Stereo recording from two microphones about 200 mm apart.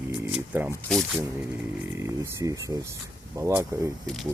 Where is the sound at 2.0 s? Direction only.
15° right (ahead or behind).